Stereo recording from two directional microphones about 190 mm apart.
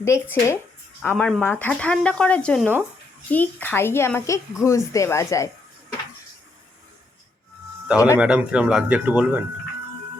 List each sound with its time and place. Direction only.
0.0 s speech: 15° left (ahead or behind)
7.9 s speech: 15° left (ahead or behind)
8.2 s speech: 5° right (ahead or behind)